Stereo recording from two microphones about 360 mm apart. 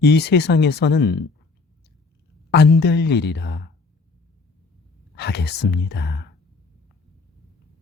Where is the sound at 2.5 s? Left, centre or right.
Left.